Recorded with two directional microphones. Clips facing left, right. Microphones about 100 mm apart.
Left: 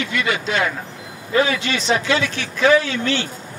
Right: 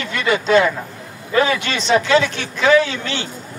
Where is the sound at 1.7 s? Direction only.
30° right (ahead or behind).